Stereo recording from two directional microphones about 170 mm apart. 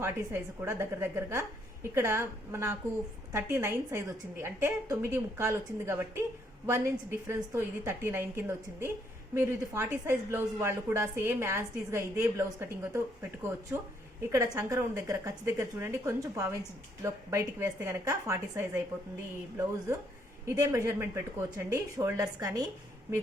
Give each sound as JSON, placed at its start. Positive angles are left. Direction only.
{"t": 0.0, "sound": "a woman's voice", "side_deg": -15}
{"t": 20.5, "sound": "a woman's voice", "side_deg": -20}